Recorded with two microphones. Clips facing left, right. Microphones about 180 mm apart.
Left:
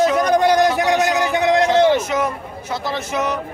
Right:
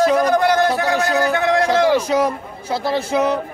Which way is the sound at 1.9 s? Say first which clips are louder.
Right 3 dB; 35° right (ahead or behind).